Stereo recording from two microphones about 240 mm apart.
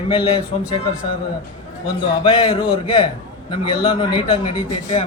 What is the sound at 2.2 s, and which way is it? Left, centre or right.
A man's voice, left.